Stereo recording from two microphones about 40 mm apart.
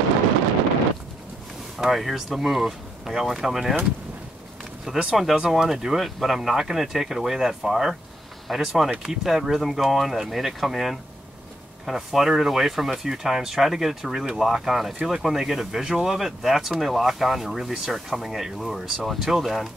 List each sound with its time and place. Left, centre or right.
1.8 s speech: centre
4.8 s speech: centre
5.1 s speech: centre